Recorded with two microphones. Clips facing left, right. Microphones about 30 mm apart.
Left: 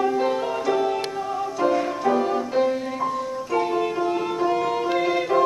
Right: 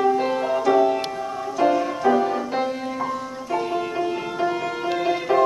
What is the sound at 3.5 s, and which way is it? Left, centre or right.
Music, centre.